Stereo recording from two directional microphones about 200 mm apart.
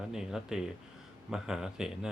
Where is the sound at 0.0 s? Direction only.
Centre (ahead or behind).